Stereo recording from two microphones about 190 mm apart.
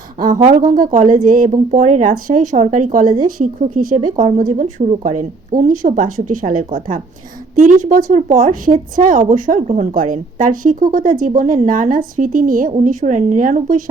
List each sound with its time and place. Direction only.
0.2 s speech: 45° right (ahead or behind)